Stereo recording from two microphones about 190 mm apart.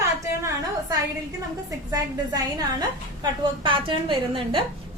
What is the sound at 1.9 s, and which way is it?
A woman's voice, 20° right (ahead or behind).